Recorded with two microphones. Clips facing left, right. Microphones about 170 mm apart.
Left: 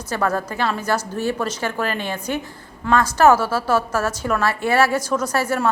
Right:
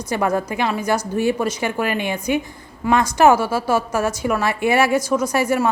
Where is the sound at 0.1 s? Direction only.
15° right (ahead or behind).